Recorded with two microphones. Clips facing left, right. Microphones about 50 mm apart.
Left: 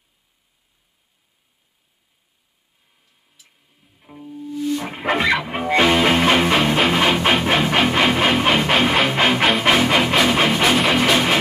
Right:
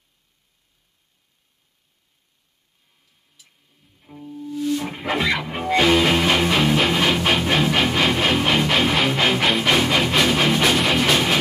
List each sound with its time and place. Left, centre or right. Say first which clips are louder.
3.4 s music: left 1 dB; centre
4.8 s dog: left 3 dB; left
5.4 s music: left 2 dB; centre